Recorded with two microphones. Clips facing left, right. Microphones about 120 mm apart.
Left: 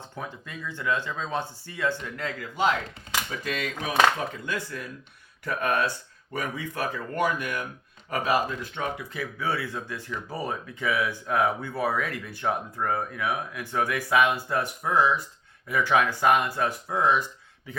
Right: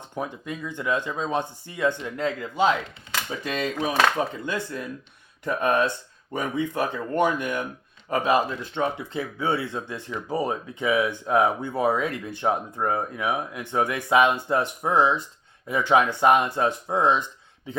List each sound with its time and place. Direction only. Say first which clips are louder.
0.2 s speech: right 6 dB; 20° right (ahead or behind)